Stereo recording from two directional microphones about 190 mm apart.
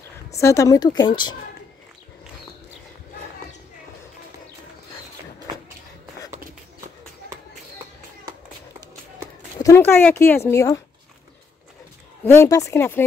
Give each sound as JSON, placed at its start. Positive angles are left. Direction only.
{"t": 0.4, "sound": "speech", "side_deg": 15}
{"t": 9.6, "sound": "speech", "side_deg": 15}
{"t": 12.3, "sound": "speech", "side_deg": 15}